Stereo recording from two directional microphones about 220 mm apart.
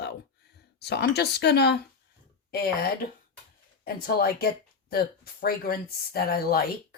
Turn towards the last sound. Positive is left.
turn(degrees=45)  # may be behind; listen again after turning